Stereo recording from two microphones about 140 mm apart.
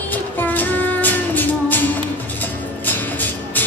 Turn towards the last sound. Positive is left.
turn(degrees=15)  # may be behind; listen again after turning